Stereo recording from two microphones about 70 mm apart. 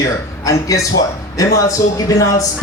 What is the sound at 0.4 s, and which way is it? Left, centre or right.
A man's voice, left.